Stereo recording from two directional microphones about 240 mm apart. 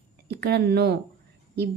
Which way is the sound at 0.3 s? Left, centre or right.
Right.